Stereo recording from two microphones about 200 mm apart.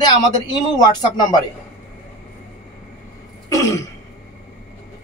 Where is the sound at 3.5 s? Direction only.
15° left (ahead or behind).